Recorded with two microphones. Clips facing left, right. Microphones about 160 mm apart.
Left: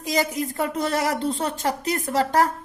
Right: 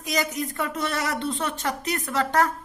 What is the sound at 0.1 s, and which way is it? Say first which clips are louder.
A woman's voice: left 3 dB; 30° left (ahead or behind).